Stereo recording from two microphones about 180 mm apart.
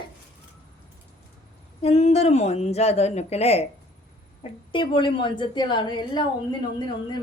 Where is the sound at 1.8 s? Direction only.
35° left (ahead or behind).